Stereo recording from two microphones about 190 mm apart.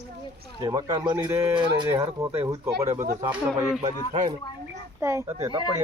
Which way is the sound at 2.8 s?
35° right (ahead or behind).